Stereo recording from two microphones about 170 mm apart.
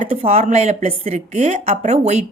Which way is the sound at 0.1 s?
35° right (ahead or behind).